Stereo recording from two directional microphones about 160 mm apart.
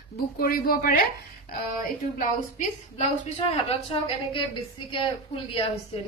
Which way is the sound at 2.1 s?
55° left (ahead or behind).